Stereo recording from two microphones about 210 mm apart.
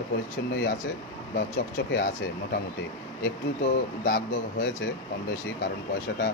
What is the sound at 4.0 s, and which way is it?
Speech, 60° left (ahead or behind).